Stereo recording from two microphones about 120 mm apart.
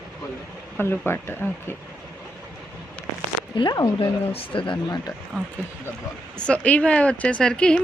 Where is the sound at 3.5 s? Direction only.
35° left (ahead or behind).